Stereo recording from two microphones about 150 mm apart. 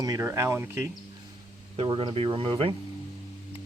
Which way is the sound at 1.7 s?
40° right (ahead or behind).